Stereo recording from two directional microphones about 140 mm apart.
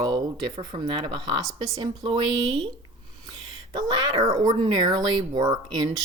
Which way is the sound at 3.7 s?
25° right (ahead or behind).